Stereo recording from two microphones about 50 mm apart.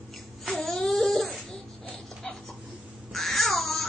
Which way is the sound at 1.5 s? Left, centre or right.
Left.